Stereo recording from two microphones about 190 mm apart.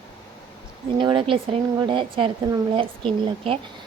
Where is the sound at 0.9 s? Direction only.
25° right (ahead or behind).